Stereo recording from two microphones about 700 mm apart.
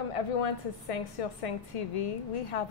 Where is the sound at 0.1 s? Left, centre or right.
Left.